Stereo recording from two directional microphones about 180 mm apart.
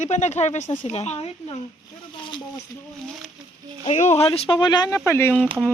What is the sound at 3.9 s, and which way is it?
Speech, 40° left (ahead or behind).